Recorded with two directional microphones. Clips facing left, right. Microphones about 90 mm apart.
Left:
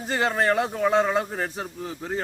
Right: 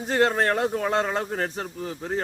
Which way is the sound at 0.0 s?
Centre (ahead or behind).